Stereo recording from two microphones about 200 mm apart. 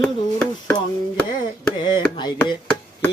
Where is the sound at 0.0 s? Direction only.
5° left (ahead or behind).